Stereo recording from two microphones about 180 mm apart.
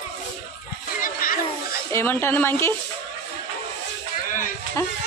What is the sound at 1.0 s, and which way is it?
Children playing, 50° left (ahead or behind).